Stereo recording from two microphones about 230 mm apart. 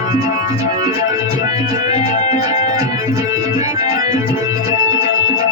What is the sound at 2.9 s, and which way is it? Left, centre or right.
Music, centre.